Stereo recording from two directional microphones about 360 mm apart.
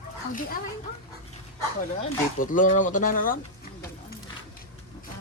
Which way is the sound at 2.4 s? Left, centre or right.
Left.